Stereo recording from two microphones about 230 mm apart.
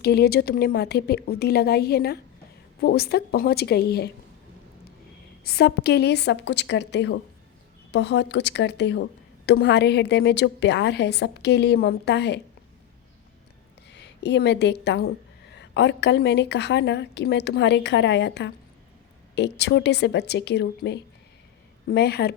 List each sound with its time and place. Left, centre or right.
0.0 s a woman's voice: left
5.4 s a woman's voice: left
13.9 s a woman's voice: left